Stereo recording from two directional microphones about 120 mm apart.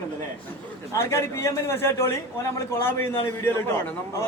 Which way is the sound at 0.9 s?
25° left (ahead or behind).